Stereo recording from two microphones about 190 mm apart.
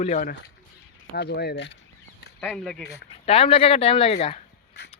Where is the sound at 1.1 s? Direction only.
60° left (ahead or behind).